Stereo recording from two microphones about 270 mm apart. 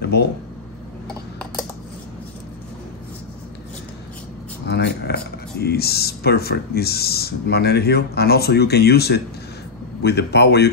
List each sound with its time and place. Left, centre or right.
0.0 s speech: left
4.6 s speech: left